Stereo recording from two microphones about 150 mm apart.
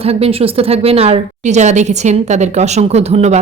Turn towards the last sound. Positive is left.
turn(degrees=-45)  # may be behind; listen again after turning